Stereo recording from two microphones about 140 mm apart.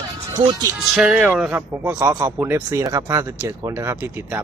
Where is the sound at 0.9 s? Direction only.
5° right (ahead or behind).